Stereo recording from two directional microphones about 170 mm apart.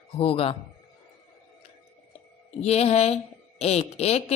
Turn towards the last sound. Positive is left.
turn(degrees=40)  # may be behind; listen again after turning